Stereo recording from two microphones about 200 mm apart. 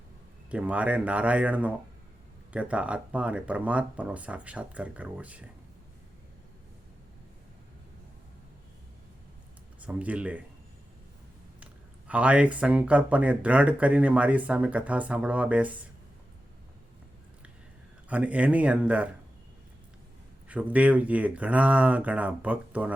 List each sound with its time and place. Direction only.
0.5 s speech: 5° right (ahead or behind)
9.8 s speech: 5° right (ahead or behind)
11.6 s speech: 5° right (ahead or behind)
18.1 s speech: 5° right (ahead or behind)
20.5 s speech: 5° right (ahead or behind)